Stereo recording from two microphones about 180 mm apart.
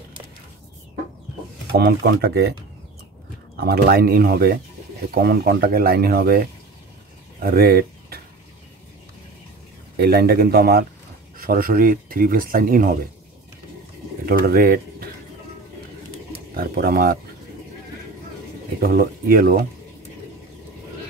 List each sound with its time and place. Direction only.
1.7 s speech: 65° right (ahead or behind)
3.6 s speech: 60° right (ahead or behind)
7.3 s a sound: 60° right (ahead or behind)
9.9 s speech: 60° right (ahead or behind)
14.3 s speech: 55° right (ahead or behind)
16.5 s speech: 55° right (ahead or behind)
18.8 s speech: 55° right (ahead or behind)